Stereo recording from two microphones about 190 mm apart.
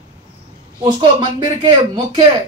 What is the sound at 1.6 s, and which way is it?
Speech, 25° right (ahead or behind).